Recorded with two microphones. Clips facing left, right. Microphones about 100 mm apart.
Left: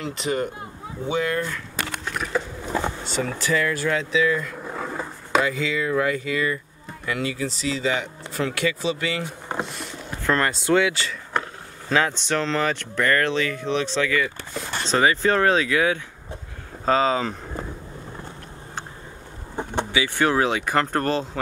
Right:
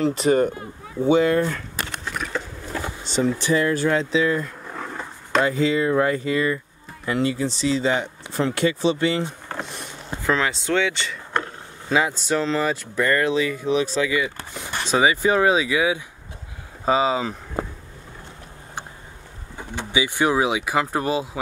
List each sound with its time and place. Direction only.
0.1 s speech: 40° right (ahead or behind)
1.0 s speech: 30° right (ahead or behind)
2.0 s a sound: centre (ahead or behind)
3.3 s speech: 25° right (ahead or behind)
4.7 s a sound: 5° left (ahead or behind)
5.4 s speech: 35° right (ahead or behind)
9.8 s boat: 20° right (ahead or behind)
10.2 s speech: centre (ahead or behind)
11.9 s speech: 10° right (ahead or behind)
19.9 s speech: 15° right (ahead or behind)